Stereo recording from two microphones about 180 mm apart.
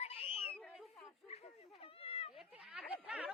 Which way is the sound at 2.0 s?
30° left (ahead or behind).